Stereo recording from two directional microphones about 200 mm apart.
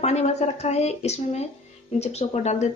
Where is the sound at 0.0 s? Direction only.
30° left (ahead or behind).